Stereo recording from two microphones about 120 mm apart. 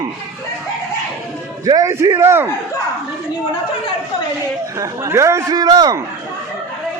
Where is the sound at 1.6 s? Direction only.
30° right (ahead or behind).